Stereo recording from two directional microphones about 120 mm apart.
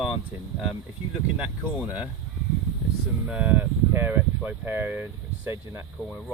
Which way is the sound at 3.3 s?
10° right (ahead or behind).